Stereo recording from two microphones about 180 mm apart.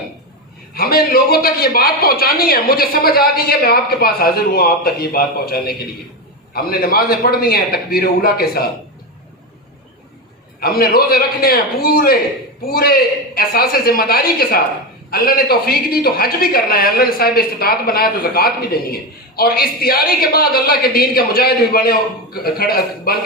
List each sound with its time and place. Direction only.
0.7 s a man's voice: 55° left (ahead or behind)
10.6 s a man's voice: 55° left (ahead or behind)